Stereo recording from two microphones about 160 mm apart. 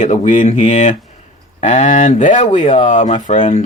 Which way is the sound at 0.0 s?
50° left (ahead or behind).